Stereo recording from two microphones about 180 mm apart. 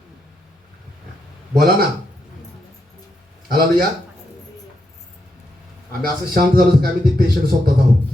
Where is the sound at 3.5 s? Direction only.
55° right (ahead or behind).